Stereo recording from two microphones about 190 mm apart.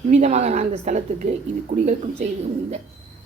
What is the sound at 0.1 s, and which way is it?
A woman's voice, 40° right (ahead or behind).